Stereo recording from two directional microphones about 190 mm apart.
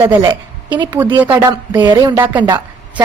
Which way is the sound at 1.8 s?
20° right (ahead or behind).